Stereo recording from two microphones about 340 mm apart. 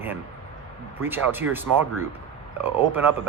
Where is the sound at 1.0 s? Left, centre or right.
Centre.